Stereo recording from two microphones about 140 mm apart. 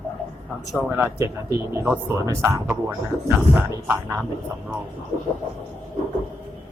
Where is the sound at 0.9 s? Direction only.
15° right (ahead or behind).